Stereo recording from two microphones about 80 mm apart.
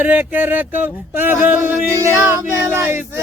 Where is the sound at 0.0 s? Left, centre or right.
Right.